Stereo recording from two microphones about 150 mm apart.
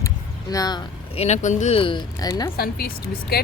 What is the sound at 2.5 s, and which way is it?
Speech, 85° left.